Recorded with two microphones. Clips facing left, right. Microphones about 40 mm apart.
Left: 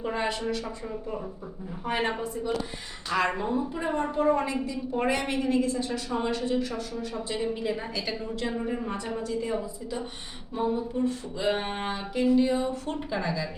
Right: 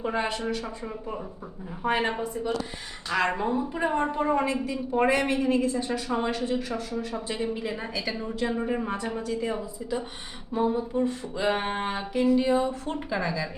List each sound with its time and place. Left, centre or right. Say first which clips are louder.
0.0 s speech: right 1 dB; centre
1.9 s speech: right 2 dB; centre
5.1 s a woman's voice: right 2 dB; centre
8.4 s speech: right 5 dB; centre
10.9 s speech: right 2 dB; centre
12.1 s speech: right 1 dB; centre